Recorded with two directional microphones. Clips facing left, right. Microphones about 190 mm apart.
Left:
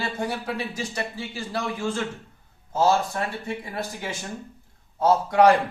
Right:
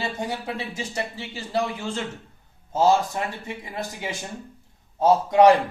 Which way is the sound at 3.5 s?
15° right (ahead or behind).